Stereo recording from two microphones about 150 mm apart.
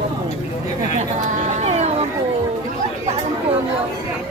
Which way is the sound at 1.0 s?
50° right (ahead or behind).